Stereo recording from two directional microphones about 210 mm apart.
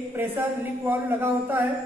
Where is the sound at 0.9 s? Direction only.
10° right (ahead or behind).